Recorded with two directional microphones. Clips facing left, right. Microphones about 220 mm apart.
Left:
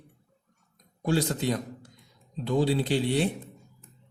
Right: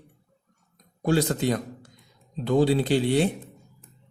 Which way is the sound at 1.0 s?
55° right (ahead or behind).